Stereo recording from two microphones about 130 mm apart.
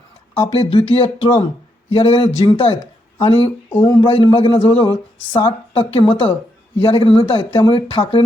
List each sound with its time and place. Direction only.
0.5 s speech: 45° left (ahead or behind)